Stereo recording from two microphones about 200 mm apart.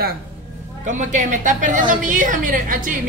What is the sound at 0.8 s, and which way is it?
A woman's voice, 40° right (ahead or behind).